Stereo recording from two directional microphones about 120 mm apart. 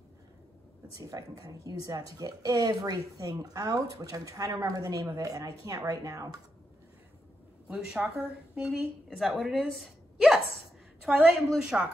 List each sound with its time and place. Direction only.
0.9 s speech: 30° right (ahead or behind)
7.6 s a woman's voice: 5° right (ahead or behind)
9.8 s a sound: centre (ahead or behind)
11.0 s a woman's voice: 5° right (ahead or behind)